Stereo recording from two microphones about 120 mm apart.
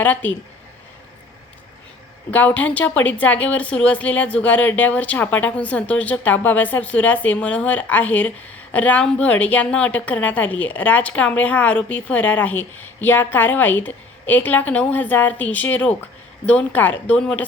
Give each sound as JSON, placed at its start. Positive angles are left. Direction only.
{"t": 0.0, "sound": "a woman's voice", "side_deg": 15}
{"t": 2.3, "sound": "a woman's voice", "side_deg": 15}